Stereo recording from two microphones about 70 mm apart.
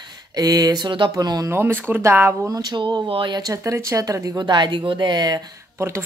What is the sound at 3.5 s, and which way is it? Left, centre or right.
Speech, right.